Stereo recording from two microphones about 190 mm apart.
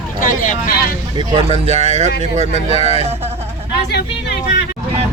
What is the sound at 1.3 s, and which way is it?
Speech, 35° right (ahead or behind).